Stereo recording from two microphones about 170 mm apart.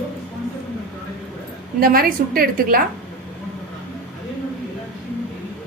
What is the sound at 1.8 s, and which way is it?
A woman's voice, 60° right (ahead or behind).